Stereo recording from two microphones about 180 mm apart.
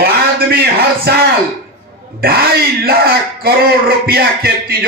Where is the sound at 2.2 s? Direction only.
55° right (ahead or behind).